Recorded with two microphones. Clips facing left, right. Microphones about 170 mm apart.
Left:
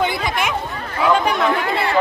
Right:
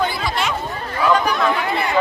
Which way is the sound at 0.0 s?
20° left (ahead or behind).